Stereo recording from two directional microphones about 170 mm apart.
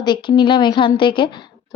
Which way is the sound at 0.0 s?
30° left (ahead or behind).